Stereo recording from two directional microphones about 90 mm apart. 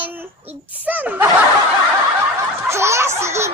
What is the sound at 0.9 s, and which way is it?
Snicker, 20° right (ahead or behind).